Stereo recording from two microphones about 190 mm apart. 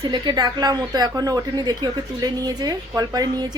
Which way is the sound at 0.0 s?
25° right (ahead or behind).